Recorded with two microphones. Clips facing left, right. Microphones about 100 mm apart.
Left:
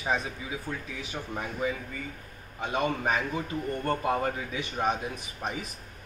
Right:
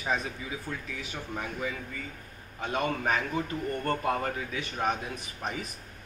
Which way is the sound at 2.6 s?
20° left (ahead or behind).